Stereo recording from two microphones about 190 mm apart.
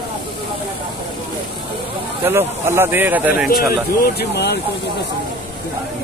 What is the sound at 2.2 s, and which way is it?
Speech, 10° right (ahead or behind).